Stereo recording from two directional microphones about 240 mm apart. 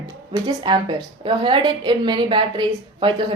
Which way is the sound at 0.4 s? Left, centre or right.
Centre.